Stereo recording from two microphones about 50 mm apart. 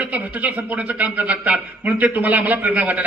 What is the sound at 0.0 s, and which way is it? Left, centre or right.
A man's voice, right.